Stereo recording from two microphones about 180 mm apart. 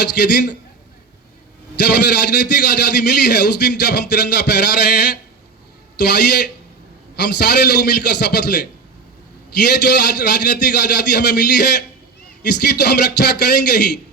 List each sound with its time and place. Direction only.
1.9 s a man's voice: 60° left (ahead or behind)
9.6 s a man's voice: 60° left (ahead or behind)